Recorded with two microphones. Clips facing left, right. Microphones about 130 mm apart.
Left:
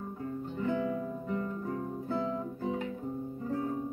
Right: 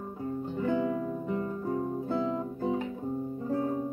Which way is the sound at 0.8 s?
40° right (ahead or behind).